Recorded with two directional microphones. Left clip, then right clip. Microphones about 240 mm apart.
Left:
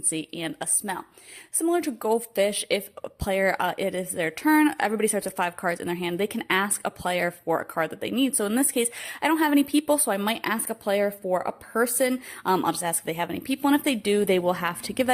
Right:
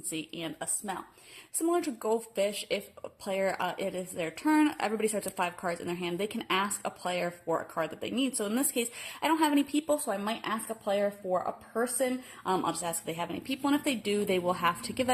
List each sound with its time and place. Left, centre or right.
0.1 s speech: left